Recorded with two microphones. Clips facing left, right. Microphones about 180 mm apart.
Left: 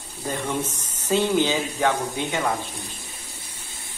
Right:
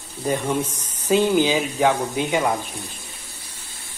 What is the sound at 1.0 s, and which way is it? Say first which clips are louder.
Speech: right 3 dB; 15° right (ahead or behind).